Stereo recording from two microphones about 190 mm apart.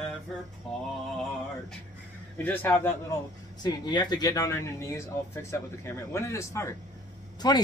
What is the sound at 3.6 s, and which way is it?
Speech, 20° left (ahead or behind).